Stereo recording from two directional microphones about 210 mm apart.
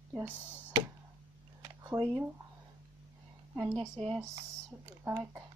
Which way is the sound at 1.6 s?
15° right (ahead or behind).